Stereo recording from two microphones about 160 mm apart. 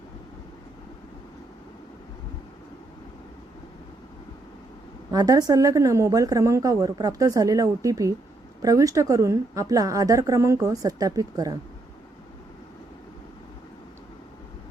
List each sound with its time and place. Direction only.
5.1 s a woman's voice: 20° right (ahead or behind)